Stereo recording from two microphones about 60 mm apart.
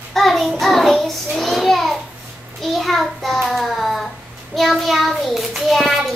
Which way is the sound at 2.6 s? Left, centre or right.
Centre.